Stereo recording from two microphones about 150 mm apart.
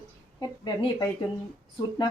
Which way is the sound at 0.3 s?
30° left (ahead or behind).